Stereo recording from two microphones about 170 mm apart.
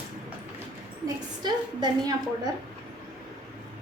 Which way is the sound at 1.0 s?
25° right (ahead or behind).